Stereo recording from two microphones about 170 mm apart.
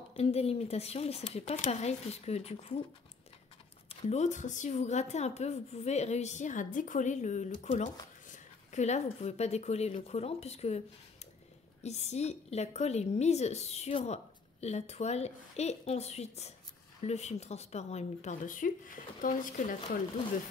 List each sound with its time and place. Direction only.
0.1 s a woman's voice: 35° left (ahead or behind)
3.9 s a woman's voice: 40° left (ahead or behind)
11.8 s a woman's voice: 40° left (ahead or behind)